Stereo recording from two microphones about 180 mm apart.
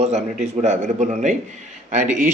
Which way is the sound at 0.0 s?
35° right (ahead or behind).